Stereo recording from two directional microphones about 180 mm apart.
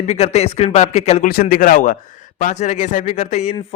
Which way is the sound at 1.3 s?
55° left (ahead or behind).